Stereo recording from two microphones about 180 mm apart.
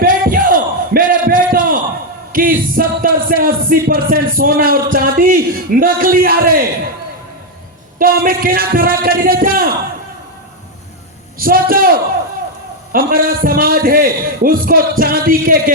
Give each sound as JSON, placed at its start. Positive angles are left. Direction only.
{"t": 0.0, "sound": "battle cry", "side_deg": -50}
{"t": 2.3, "sound": "music", "side_deg": -50}
{"t": 3.8, "sound": "a man's voice", "side_deg": -55}
{"t": 7.9, "sound": "speech", "side_deg": -50}
{"t": 11.3, "sound": "a man's voice", "side_deg": -55}